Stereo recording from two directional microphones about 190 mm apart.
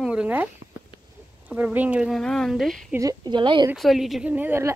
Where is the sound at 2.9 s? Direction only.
20° right (ahead or behind).